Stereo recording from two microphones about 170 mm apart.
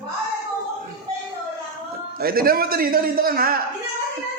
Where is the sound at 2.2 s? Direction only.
60° right (ahead or behind).